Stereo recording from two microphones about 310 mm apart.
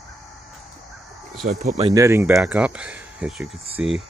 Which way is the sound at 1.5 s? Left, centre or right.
Right.